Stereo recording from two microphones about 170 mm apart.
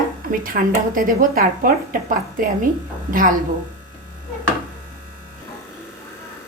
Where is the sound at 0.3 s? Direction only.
55° right (ahead or behind).